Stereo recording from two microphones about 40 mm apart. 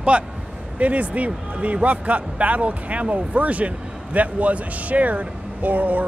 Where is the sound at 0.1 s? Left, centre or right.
Right.